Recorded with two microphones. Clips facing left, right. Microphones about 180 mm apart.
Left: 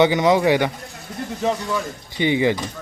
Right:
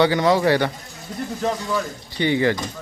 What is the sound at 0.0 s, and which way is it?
Speech, 20° left (ahead or behind).